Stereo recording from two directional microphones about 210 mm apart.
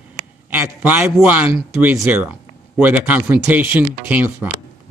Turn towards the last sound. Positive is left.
turn(degrees=-5)  # may be behind; listen again after turning